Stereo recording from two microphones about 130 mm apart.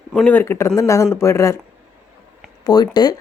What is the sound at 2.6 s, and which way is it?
Speech, 30° left (ahead or behind).